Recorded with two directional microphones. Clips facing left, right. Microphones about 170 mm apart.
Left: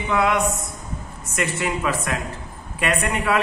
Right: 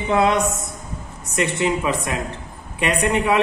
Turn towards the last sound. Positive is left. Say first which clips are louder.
# right 3 dB
turn(degrees=-20)  # may be behind; listen again after turning